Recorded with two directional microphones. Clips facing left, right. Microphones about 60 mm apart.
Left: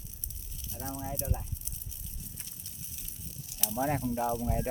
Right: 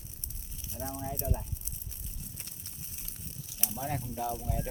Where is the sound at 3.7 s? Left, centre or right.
Left.